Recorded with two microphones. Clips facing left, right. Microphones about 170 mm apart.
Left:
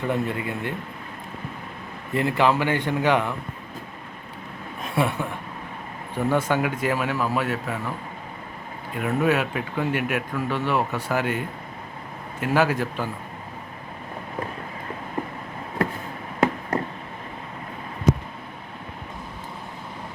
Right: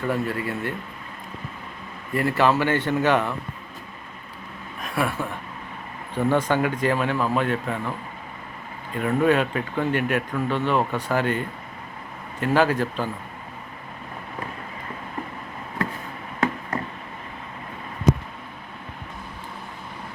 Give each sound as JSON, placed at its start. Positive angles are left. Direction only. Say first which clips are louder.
{"t": 0.1, "sound": "speech", "louder": "right 1 dB", "side_deg": 20}
{"t": 2.1, "sound": "speech", "louder": "even", "side_deg": 15}
{"t": 4.8, "sound": "speech", "louder": "left 1 dB", "side_deg": 25}
{"t": 6.1, "sound": "speech", "louder": "right 1 dB", "side_deg": 10}
{"t": 9.0, "sound": "speech", "louder": "right 2 dB", "side_deg": 5}